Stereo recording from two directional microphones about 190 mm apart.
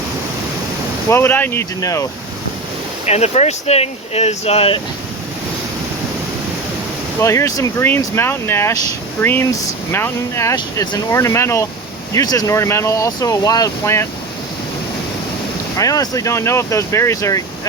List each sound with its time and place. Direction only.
1.1 s speech: 10° left (ahead or behind)
3.1 s speech: 35° left (ahead or behind)
7.2 s speech: 15° left (ahead or behind)
15.8 s speech: 20° left (ahead or behind)